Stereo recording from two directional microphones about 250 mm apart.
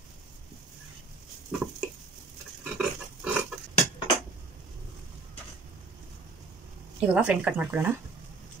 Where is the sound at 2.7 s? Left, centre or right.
Centre.